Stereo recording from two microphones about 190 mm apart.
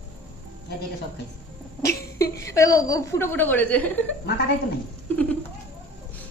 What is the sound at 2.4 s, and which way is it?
A woman's voice, 15° left (ahead or behind).